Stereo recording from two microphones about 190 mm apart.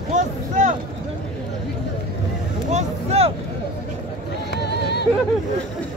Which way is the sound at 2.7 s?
35° right (ahead or behind).